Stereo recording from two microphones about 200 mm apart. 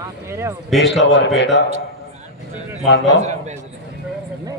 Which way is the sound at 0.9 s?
60° left (ahead or behind).